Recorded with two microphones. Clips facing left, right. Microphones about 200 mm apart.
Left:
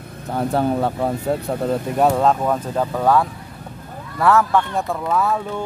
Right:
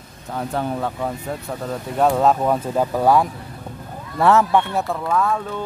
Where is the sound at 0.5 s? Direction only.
35° left (ahead or behind).